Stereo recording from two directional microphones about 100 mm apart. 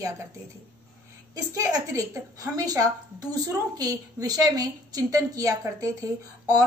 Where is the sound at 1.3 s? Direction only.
35° right (ahead or behind).